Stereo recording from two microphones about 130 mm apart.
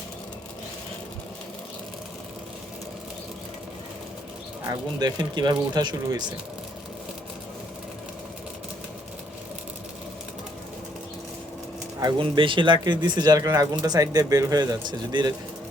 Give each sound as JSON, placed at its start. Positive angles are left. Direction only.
{"t": 4.6, "sound": "speech", "side_deg": -30}
{"t": 11.9, "sound": "speech", "side_deg": -35}